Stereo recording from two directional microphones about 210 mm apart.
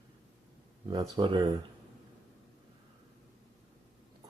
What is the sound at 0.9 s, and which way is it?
Speech, 20° right (ahead or behind).